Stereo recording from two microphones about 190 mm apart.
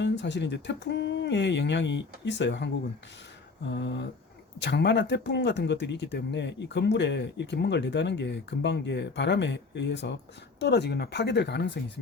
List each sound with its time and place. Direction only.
0.0 s speech: 65° left (ahead or behind)
3.7 s speech: 65° left (ahead or behind)